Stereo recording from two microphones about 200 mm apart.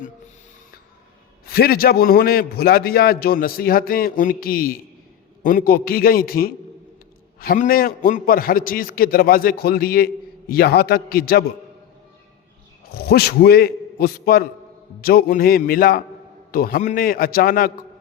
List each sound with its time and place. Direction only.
1.5 s a man's voice: 50° left (ahead or behind)
12.9 s a man's voice: 50° left (ahead or behind)